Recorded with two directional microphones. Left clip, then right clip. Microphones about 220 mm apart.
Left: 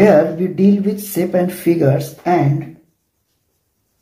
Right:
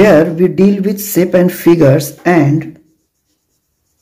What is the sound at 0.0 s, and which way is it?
Speech, 40° right (ahead or behind).